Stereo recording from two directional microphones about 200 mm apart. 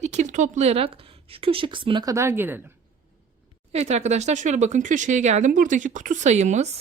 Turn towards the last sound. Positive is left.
turn(degrees=-35)  # may be behind; listen again after turning